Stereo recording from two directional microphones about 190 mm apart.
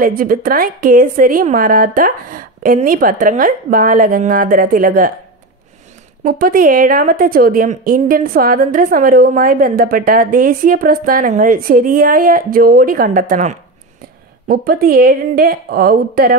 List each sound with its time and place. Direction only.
0.0 s a woman's voice: 50° right (ahead or behind)
6.2 s a woman's voice: 50° right (ahead or behind)